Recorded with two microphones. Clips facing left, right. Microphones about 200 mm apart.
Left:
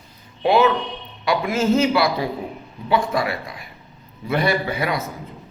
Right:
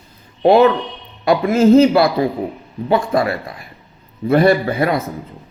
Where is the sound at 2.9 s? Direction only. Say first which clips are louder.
Right 5 dB; 55° right (ahead or behind).